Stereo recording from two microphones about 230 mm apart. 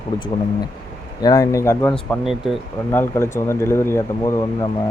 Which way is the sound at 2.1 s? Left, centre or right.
Centre.